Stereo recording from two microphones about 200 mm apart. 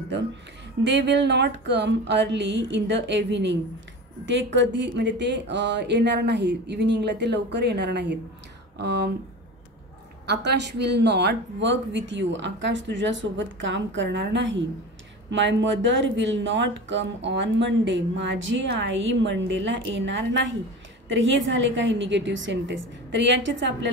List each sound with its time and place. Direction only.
0.8 s speech: 60° right (ahead or behind)
10.2 s a woman's voice: 60° right (ahead or behind)